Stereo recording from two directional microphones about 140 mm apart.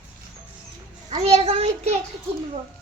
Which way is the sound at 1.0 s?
50° right (ahead or behind).